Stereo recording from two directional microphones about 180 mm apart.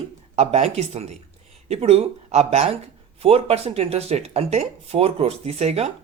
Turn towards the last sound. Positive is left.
turn(degrees=-35)  # may be behind; listen again after turning